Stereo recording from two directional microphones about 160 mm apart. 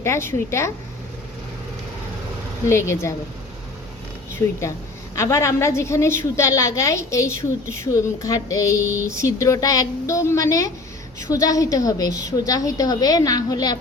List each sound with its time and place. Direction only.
0.0 s a woman's voice: 15° left (ahead or behind)
2.6 s a woman's voice: 15° left (ahead or behind)
4.4 s a woman's voice: 15° left (ahead or behind)
8.8 s a sound: 10° right (ahead or behind)
9.0 s a woman's voice: 20° left (ahead or behind)